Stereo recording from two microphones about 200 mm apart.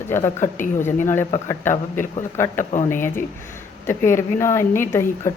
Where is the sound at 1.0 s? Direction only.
10° left (ahead or behind).